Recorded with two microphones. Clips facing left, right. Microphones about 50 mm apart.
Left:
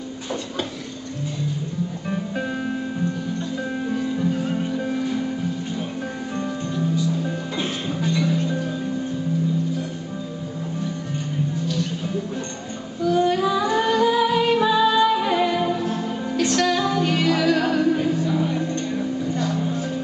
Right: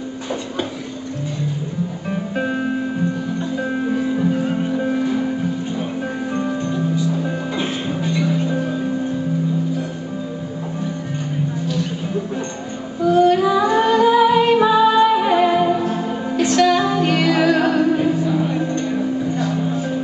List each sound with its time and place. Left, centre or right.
2.0 s music: centre
6.3 s music: centre
11.6 s music: centre
13.2 s music: centre